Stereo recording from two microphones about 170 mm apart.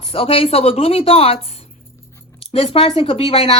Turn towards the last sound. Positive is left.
turn(degrees=35)  # may be behind; listen again after turning